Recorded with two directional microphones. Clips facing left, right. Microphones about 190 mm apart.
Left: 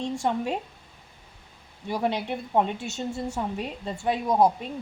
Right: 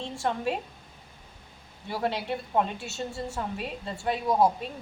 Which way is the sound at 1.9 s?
20° left (ahead or behind).